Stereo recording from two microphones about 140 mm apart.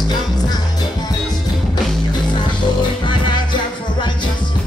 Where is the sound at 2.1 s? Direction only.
30° left (ahead or behind).